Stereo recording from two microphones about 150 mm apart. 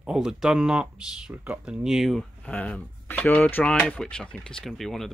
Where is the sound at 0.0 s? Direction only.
5° right (ahead or behind).